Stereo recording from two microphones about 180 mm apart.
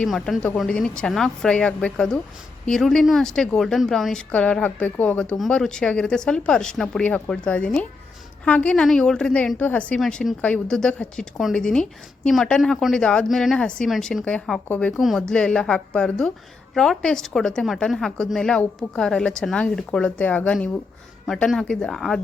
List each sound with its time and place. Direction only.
0.0 s a woman's voice: 5° left (ahead or behind)